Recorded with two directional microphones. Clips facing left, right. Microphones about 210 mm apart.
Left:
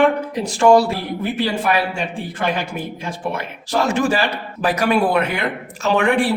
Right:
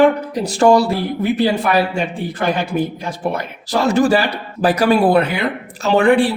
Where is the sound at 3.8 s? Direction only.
35° right (ahead or behind).